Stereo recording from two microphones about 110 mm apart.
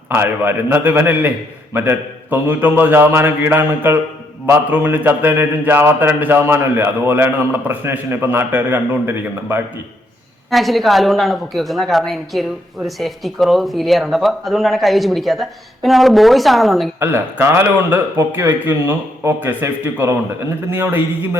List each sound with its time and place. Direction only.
0.1 s a man's voice: 20° right (ahead or behind)
10.5 s a woman's voice: centre (ahead or behind)
17.0 s a man's voice: 20° right (ahead or behind)